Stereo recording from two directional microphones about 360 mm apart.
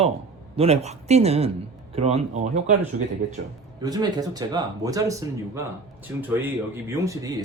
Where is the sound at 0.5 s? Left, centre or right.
Centre.